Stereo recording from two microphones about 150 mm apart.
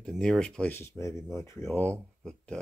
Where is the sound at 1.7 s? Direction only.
5° left (ahead or behind).